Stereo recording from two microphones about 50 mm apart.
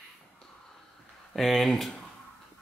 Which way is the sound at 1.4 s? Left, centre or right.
Centre.